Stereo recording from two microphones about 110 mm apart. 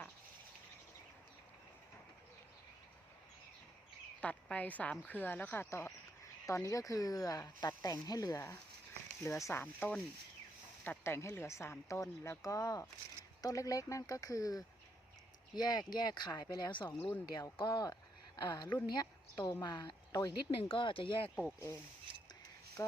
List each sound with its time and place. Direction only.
4.2 s a woman's voice: 10° left (ahead or behind); by 21.2 s 50° left (ahead or behind)
21.2 s speech: 10° left (ahead or behind)
22.1 s a sound: 50° right (ahead or behind)
22.8 s speech: 25° left (ahead or behind)